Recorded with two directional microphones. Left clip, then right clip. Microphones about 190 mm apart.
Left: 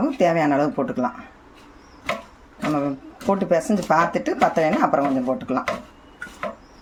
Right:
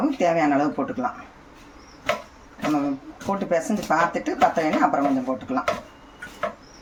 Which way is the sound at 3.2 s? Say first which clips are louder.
Left 4 dB; 40° left (ahead or behind).